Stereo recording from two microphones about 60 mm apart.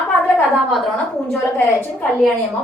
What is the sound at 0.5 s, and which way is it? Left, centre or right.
Speech, centre.